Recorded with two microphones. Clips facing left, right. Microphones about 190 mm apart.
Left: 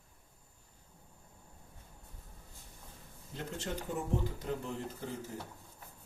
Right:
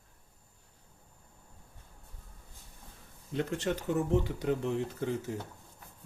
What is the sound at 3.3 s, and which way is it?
Speech, 70° right (ahead or behind).